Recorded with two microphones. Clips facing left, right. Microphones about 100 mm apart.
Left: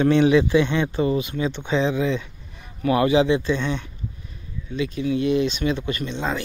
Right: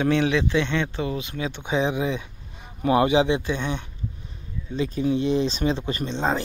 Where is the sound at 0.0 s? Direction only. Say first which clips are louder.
Left 5 dB; centre (ahead or behind).